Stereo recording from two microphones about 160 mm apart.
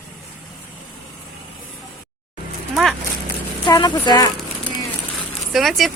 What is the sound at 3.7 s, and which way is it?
Speech, 20° left (ahead or behind).